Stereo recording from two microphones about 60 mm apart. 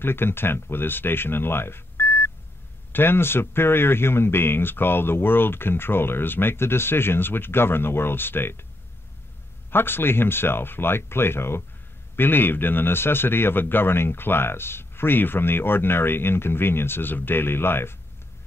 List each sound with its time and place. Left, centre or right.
0.0 s a man's voice: left
9.7 s a man's voice: left